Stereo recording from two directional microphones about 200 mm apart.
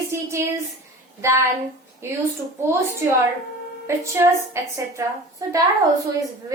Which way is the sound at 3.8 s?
15° right (ahead or behind).